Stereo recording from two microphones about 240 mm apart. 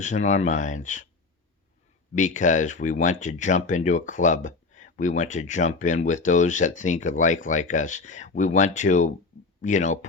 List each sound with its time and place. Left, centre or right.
0.0 s speech: left
2.1 s speech: left